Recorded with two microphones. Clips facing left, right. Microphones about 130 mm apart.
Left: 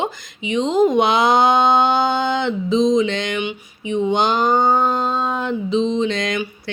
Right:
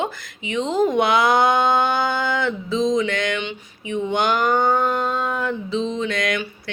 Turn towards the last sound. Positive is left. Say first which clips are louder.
# left 3 dB
turn(degrees=25)  # may be behind; listen again after turning